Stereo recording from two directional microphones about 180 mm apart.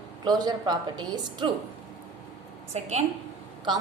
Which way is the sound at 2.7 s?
35° right (ahead or behind).